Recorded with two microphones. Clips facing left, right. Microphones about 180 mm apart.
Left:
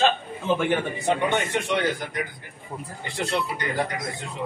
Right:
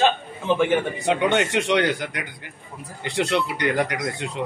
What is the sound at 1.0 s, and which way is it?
Speech, 90° right.